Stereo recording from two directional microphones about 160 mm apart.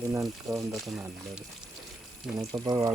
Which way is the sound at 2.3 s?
25° right (ahead or behind).